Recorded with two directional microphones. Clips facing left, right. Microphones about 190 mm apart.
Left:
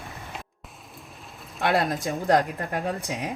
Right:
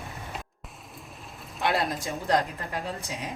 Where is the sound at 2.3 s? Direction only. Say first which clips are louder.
Left 4 dB; 55° left (ahead or behind).